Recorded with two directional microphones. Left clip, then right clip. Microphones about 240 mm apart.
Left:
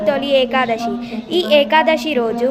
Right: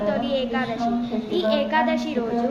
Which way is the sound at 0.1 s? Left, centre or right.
Left.